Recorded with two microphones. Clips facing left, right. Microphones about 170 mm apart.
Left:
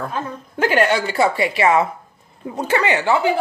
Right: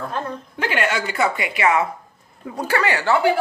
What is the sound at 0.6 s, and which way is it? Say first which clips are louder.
A woman's voice: left 6 dB; 40° left (ahead or behind).